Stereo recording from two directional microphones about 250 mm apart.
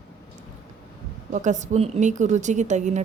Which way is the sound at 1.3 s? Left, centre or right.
Right.